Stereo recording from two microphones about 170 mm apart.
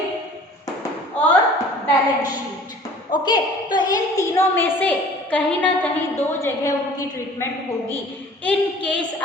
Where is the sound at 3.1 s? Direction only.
25° left (ahead or behind).